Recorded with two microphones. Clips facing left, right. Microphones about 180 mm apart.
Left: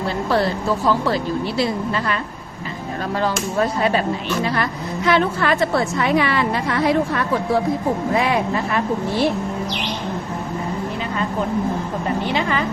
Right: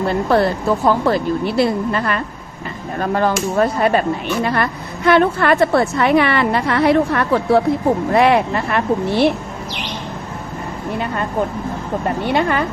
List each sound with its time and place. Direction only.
0.1 s a woman's voice: 55° right (ahead or behind)
12.3 s a woman's voice: 50° right (ahead or behind)